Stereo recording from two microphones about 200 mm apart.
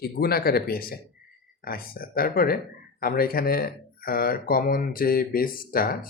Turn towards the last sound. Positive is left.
turn(degrees=45)  # may be behind; listen again after turning